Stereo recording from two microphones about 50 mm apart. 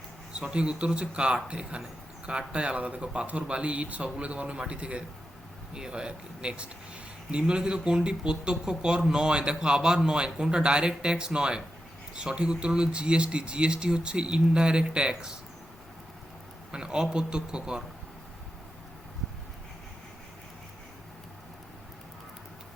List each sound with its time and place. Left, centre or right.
0.3 s a man's voice: centre
16.7 s a man's voice: centre